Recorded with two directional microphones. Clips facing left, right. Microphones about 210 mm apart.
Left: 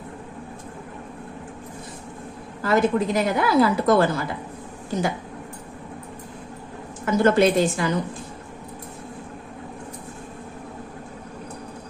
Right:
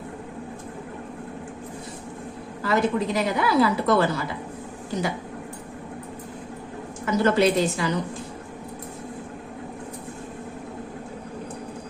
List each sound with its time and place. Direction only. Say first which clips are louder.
2.6 s a woman's voice: left 3 dB; 50° left (ahead or behind)
7.0 s a woman's voice: left 2 dB; 50° left (ahead or behind)